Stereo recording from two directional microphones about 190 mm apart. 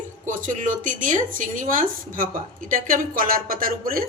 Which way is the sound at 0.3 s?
40° right (ahead or behind).